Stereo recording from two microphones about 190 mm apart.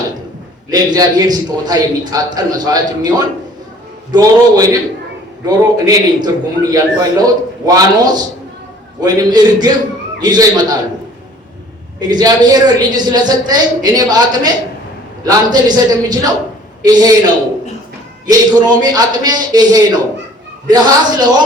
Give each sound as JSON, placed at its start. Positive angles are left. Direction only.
{"t": 0.7, "sound": "a woman's voice", "side_deg": -20}
{"t": 11.9, "sound": "a woman's voice", "side_deg": -20}